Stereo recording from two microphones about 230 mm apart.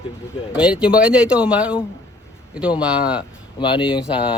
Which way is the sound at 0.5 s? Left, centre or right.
Centre.